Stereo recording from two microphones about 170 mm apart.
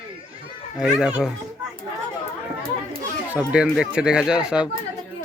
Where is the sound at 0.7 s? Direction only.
5° right (ahead or behind).